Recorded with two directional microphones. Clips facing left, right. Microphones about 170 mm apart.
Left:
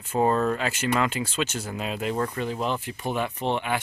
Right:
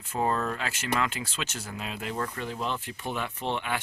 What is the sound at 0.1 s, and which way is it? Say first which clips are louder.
Speech: left 6 dB; 25° left (ahead or behind).